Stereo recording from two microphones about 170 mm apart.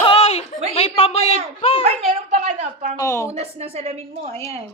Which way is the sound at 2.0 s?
45° right (ahead or behind).